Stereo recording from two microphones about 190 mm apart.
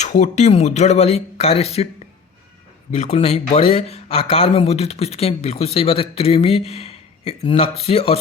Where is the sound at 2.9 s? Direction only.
35° left (ahead or behind).